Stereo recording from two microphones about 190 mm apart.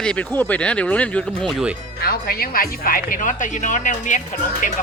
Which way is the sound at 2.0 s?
55° left (ahead or behind).